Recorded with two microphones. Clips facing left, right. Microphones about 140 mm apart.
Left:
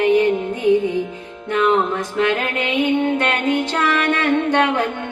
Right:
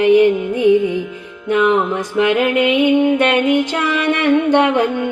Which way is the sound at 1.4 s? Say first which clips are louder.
Right 3 dB; 15° right (ahead or behind).